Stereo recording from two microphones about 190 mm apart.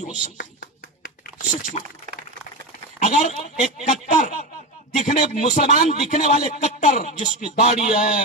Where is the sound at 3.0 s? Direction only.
35° left (ahead or behind).